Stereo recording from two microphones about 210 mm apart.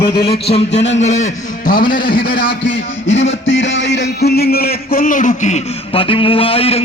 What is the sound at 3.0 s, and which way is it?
A man's voice, 65° left (ahead or behind).